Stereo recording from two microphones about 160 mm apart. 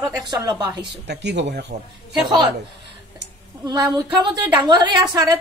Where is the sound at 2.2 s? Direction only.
25° right (ahead or behind).